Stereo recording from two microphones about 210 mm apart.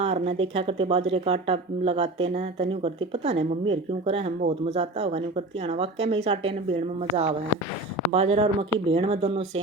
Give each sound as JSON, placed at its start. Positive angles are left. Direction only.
{"t": 0.0, "sound": "speech", "side_deg": -30}